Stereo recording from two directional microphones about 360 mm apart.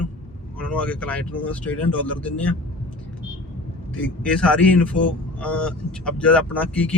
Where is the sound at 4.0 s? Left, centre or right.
Centre.